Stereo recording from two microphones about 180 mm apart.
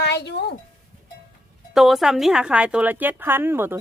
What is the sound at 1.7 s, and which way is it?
Speech, centre (ahead or behind).